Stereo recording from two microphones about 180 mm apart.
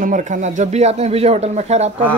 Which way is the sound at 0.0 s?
45° right (ahead or behind).